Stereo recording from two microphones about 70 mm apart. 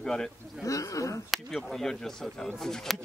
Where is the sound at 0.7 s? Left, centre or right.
Left.